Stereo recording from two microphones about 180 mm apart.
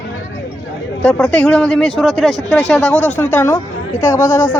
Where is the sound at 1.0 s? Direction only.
5° left (ahead or behind).